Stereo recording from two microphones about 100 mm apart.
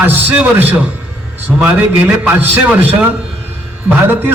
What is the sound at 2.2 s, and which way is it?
Speech, 20° right (ahead or behind).